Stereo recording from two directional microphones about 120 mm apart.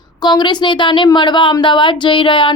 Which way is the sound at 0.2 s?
35° left (ahead or behind).